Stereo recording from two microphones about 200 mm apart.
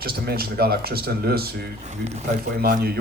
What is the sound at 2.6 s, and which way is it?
Speech, 50° right (ahead or behind).